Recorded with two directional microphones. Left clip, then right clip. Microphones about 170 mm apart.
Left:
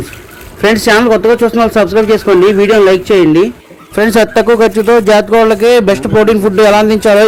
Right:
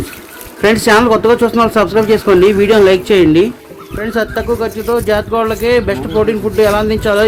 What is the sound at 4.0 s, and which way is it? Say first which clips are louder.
Speech: left 8 dB; 45° left (ahead or behind).